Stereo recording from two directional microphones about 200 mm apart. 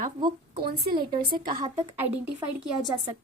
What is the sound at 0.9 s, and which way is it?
Speech, 25° right (ahead or behind).